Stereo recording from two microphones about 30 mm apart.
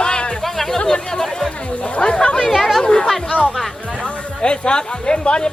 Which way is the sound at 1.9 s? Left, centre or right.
Left.